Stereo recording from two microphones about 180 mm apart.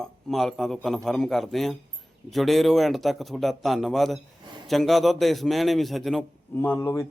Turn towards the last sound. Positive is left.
turn(degrees=15)  # may be behind; listen again after turning